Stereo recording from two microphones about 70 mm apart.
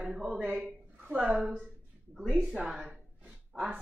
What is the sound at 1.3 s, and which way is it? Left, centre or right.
Speech, centre.